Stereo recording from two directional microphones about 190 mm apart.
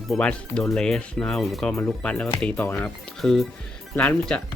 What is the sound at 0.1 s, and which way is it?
Speech, 5° left (ahead or behind).